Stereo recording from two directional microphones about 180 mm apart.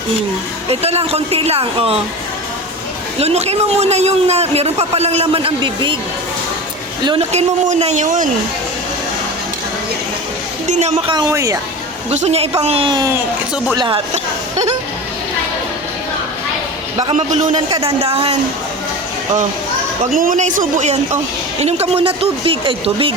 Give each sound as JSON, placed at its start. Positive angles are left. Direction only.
{"t": 0.7, "sound": "a man's voice", "side_deg": -35}
{"t": 3.2, "sound": "a man's voice", "side_deg": -35}
{"t": 7.0, "sound": "a woman's voice", "side_deg": -25}
{"t": 7.3, "sound": "speech", "side_deg": -40}
{"t": 10.7, "sound": "a woman's voice", "side_deg": -40}
{"t": 12.1, "sound": "a man's voice", "side_deg": -35}
{"t": 17.0, "sound": "a man's voice", "side_deg": -40}
{"t": 20.1, "sound": "a man's voice", "side_deg": -45}